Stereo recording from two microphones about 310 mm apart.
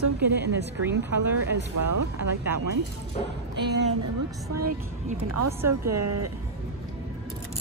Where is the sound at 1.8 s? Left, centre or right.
Right.